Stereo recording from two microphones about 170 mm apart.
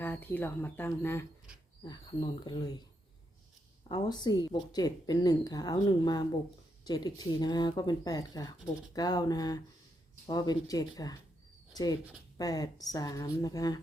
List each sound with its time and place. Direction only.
0.0 s speech: 10° left (ahead or behind)
1.8 s a woman's voice: 25° left (ahead or behind)
3.8 s a woman's voice: 25° left (ahead or behind)